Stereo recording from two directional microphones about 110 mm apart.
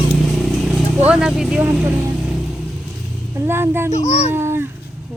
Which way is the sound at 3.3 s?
25° right (ahead or behind).